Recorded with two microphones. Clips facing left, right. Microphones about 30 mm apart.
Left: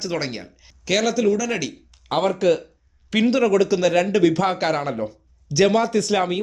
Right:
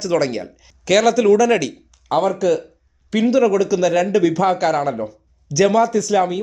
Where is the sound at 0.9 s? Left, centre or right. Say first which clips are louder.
Right 7 dB; centre.